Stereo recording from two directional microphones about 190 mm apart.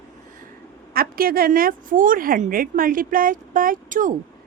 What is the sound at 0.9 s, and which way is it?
A woman's voice, 50° right (ahead or behind).